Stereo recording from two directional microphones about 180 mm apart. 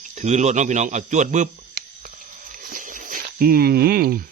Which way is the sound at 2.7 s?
45° right (ahead or behind).